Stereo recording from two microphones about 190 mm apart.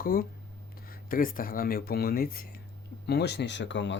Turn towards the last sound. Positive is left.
turn(degrees=75)  # may be behind; listen again after turning